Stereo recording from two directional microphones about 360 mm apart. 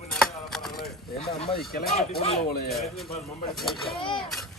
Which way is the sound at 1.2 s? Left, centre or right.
Left.